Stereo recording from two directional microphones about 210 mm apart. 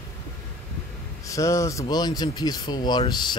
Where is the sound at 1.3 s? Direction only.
15° left (ahead or behind).